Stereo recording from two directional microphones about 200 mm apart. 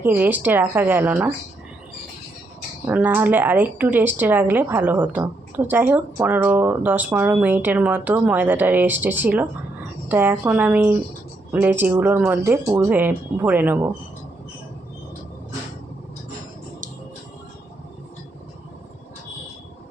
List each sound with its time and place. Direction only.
0.0 s speech: 10° right (ahead or behind)
2.8 s speech: 10° right (ahead or behind)